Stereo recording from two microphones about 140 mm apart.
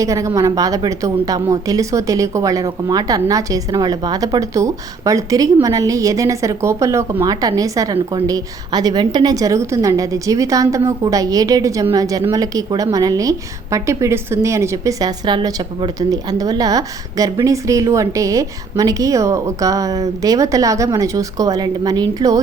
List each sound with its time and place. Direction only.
0.0 s a woman's voice: 20° right (ahead or behind)